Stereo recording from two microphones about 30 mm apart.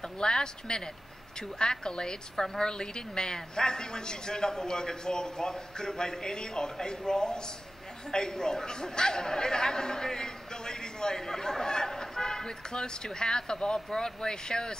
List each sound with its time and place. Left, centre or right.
0.0 s a man's voice: left